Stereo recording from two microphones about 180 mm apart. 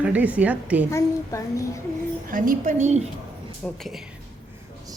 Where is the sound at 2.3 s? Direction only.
50° right (ahead or behind).